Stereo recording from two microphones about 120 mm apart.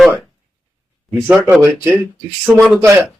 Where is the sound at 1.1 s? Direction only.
5° right (ahead or behind).